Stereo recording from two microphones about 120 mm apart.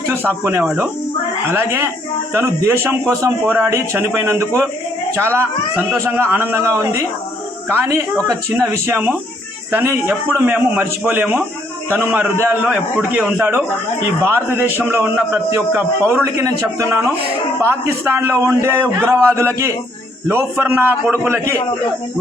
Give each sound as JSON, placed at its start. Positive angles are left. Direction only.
{"t": 0.6, "sound": "speech", "side_deg": -5}
{"t": 1.5, "sound": "a man's voice", "side_deg": -20}
{"t": 8.3, "sound": "a man's voice", "side_deg": -25}